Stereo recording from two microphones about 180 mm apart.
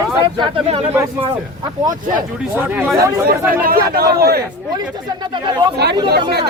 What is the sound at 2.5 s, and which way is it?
Speech, 10° right (ahead or behind).